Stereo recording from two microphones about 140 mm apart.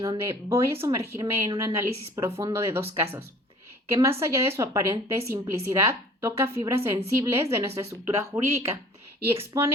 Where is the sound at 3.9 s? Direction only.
20° right (ahead or behind).